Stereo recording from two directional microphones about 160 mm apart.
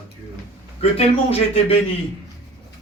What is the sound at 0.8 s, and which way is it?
A man's voice, 40° left (ahead or behind).